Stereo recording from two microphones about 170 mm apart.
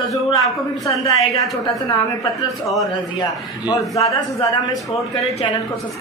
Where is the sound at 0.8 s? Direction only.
20° left (ahead or behind).